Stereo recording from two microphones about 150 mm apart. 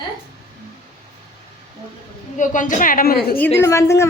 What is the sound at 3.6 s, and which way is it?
Speech, 20° left (ahead or behind).